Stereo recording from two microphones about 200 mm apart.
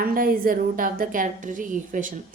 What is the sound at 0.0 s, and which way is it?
A woman's voice, 45° right (ahead or behind).